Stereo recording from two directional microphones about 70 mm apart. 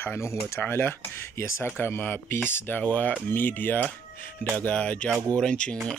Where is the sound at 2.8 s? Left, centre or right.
Left.